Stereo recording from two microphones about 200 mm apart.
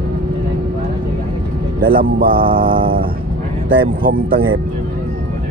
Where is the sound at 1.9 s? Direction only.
45° right (ahead or behind).